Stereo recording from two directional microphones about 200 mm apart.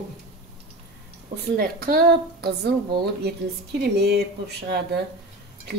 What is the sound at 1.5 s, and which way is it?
A woman's voice, 50° right (ahead or behind).